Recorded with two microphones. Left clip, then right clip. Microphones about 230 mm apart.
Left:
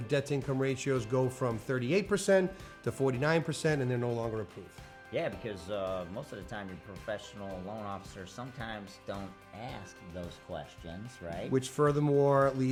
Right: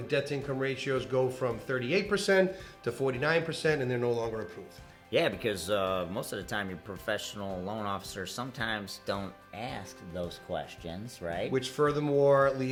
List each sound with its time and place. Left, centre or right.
0.1 s speech: left
5.1 s speech: centre
11.5 s speech: left